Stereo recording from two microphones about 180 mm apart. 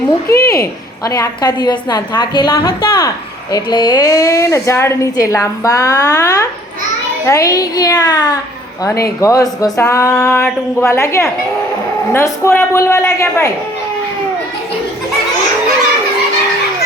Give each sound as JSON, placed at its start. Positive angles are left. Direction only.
{"t": 0.3, "sound": "a woman's voice", "side_deg": 15}